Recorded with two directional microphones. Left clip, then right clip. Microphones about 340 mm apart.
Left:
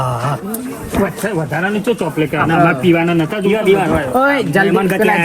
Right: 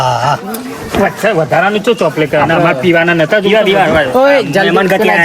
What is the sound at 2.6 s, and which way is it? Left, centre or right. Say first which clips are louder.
A man's voice: right 4 dB; right.